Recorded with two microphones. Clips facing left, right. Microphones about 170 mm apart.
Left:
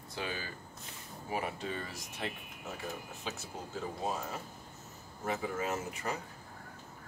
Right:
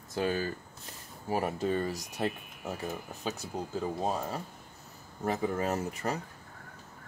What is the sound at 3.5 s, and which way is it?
Speech, 35° right (ahead or behind).